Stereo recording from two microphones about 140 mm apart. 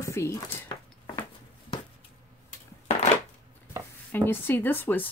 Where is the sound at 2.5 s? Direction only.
55° left (ahead or behind).